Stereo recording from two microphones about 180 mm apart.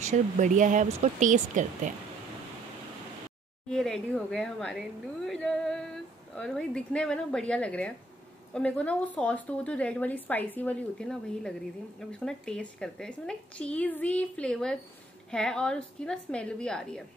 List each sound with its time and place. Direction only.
0.0 s speech: 40° right (ahead or behind)
3.6 s a woman's voice: 5° left (ahead or behind)